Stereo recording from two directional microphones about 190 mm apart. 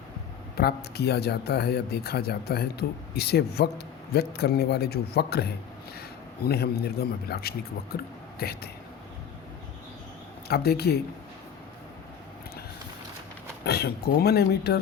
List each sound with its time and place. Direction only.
0.5 s speech: 55° left (ahead or behind)
10.5 s speech: 55° left (ahead or behind)
13.7 s speech: 60° left (ahead or behind)